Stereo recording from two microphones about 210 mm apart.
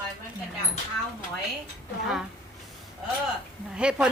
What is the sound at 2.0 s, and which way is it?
Speech, centre (ahead or behind).